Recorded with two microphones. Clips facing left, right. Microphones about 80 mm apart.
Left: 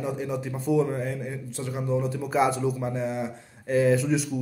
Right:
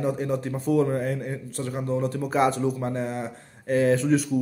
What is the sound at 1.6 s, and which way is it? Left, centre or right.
Speech, centre.